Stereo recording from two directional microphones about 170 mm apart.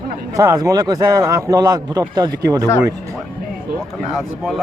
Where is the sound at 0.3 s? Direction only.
20° right (ahead or behind).